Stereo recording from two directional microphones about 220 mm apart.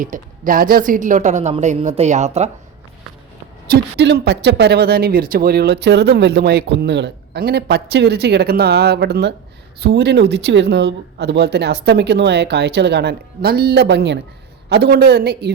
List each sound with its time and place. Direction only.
0.0 s speech: 40° right (ahead or behind)
3.7 s speech: 50° right (ahead or behind)